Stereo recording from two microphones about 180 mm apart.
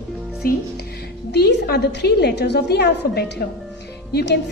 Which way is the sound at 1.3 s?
65° left (ahead or behind).